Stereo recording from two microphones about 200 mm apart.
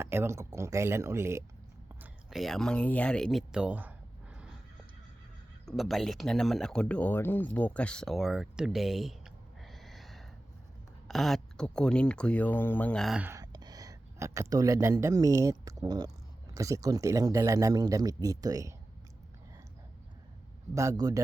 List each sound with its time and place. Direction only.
0.0 s speech: 10° right (ahead or behind)
5.6 s speech: centre (ahead or behind); by 18.7 s 15° right (ahead or behind)
20.7 s speech: 15° right (ahead or behind)